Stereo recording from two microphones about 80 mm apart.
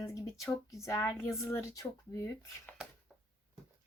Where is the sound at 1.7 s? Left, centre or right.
Left.